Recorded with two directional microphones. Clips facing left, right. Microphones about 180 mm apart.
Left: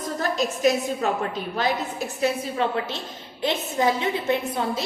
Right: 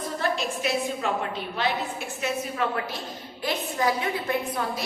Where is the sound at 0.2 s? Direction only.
40° left (ahead or behind).